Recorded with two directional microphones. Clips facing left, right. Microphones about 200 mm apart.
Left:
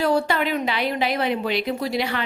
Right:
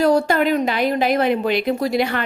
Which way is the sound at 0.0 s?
45° right (ahead or behind).